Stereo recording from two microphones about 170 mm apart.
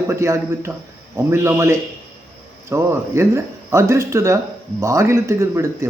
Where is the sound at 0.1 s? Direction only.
15° right (ahead or behind).